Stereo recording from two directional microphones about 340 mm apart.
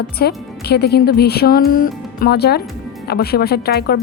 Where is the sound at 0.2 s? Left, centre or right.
Left.